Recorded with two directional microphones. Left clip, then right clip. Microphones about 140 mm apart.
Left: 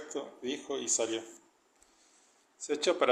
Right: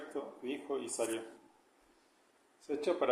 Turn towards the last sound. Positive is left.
turn(degrees=50)  # may be behind; listen again after turning